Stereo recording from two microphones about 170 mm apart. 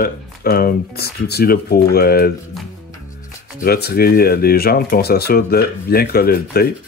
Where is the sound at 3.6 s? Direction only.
65° left (ahead or behind).